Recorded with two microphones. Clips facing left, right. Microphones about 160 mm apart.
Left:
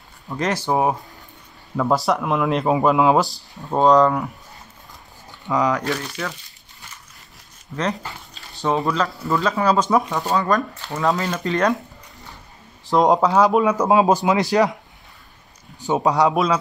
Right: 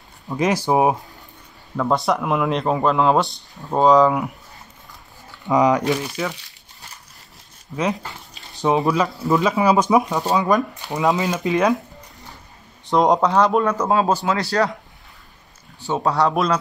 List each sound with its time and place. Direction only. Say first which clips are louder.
0.3 s speech: right 3 dB; 15° right (ahead or behind)
1.8 s speech: even; centre (ahead or behind)
5.4 s speech: right 4 dB; 20° right (ahead or behind)
8.5 s a man's voice: right 2 dB; 15° right (ahead or behind); by 14.8 s 20° left (ahead or behind)
15.8 s a man's voice: left 2 dB; 15° left (ahead or behind)